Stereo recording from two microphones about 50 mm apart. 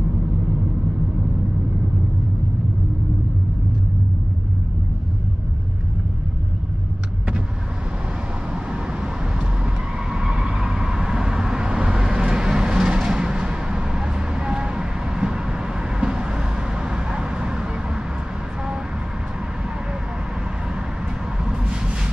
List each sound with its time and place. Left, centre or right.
10.1 s vehicle: centre